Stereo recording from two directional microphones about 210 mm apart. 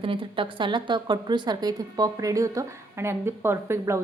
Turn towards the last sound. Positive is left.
turn(degrees=-10)  # may be behind; listen again after turning